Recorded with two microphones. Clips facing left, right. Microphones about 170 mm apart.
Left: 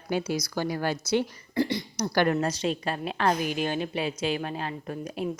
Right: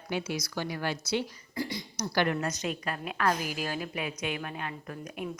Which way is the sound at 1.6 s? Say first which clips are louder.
Left 8 dB; 65° left (ahead or behind).